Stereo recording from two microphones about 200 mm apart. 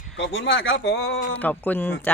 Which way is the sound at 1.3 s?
10° left (ahead or behind).